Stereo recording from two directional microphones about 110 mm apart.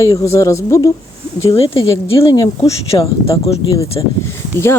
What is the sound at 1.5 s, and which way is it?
Speech, 55° left (ahead or behind).